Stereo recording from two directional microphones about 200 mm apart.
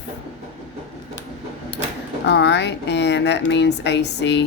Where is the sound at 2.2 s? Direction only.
60° left (ahead or behind).